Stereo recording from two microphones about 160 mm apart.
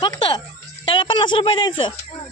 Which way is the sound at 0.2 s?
25° left (ahead or behind).